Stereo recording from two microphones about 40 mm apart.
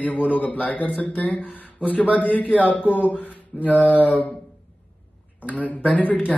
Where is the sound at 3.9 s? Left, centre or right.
Left.